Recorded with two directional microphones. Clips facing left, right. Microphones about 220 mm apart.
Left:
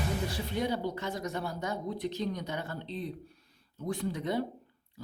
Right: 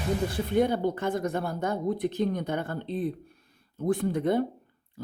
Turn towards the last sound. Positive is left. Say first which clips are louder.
# right 6 dB
turn(degrees=-55)  # may be behind; listen again after turning